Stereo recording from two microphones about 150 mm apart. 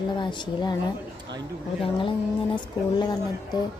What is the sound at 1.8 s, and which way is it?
Speech, 35° left (ahead or behind).